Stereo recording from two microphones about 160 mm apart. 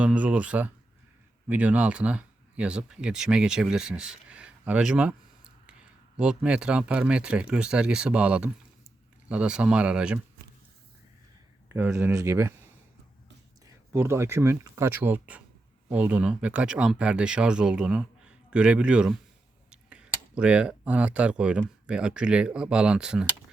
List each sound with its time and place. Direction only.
0.0 s speech: 10° right (ahead or behind)
11.7 s speech: 15° right (ahead or behind)
13.7 s speech: 20° right (ahead or behind)